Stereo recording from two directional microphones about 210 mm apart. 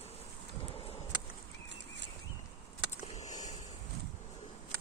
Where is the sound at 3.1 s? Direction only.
35° left (ahead or behind).